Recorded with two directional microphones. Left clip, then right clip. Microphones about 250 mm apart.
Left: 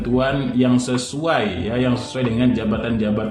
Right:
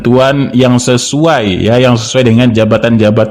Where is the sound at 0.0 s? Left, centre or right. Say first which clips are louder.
Right 12 dB; right.